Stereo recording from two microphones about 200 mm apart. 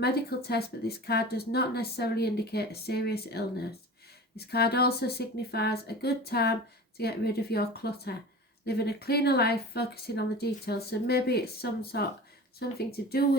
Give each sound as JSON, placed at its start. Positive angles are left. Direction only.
{"t": 0.0, "sound": "speech", "side_deg": 55}